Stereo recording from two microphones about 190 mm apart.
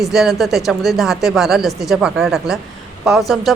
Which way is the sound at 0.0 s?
Centre (ahead or behind).